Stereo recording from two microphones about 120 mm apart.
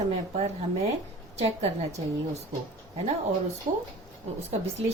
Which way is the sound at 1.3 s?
60° right (ahead or behind).